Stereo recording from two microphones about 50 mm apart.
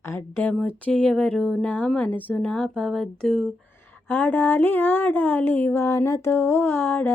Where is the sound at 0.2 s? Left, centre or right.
Left.